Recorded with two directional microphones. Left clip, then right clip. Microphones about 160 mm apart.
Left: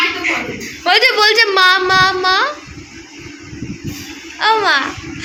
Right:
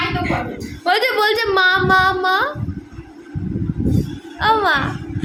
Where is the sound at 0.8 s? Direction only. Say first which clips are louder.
Left 5 dB; 10° right (ahead or behind).